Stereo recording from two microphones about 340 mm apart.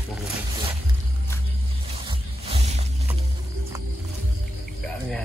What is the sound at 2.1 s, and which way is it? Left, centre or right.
Music, centre.